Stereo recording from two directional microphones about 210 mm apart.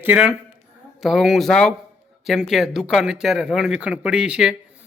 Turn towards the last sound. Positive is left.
turn(degrees=-5)  # may be behind; listen again after turning